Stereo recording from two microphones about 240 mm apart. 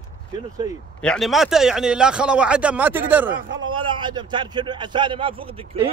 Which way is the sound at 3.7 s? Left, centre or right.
Centre.